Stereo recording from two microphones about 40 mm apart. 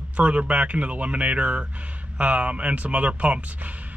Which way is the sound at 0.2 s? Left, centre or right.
Right.